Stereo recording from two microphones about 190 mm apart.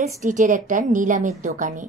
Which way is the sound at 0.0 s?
40° right (ahead or behind).